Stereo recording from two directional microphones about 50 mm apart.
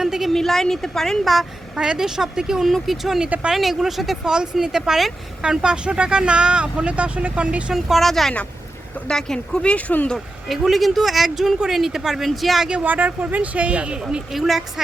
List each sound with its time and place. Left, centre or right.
0.0 s a sound: centre
0.3 s a woman's voice: centre
1.2 s speech: centre
2.6 s speech: centre
4.2 s speech: centre
5.4 s speech: centre
7.7 s speech: centre
8.0 s a woman's voice: centre; by 9.8 s left
10.5 s speech: centre
12.8 s speech: right
14.3 s speech: centre